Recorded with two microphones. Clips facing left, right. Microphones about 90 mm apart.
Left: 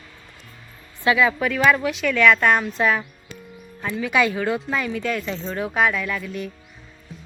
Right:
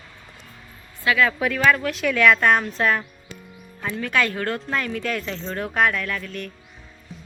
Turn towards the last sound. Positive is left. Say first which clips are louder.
# left 2 dB
turn(degrees=5)  # may be behind; listen again after turning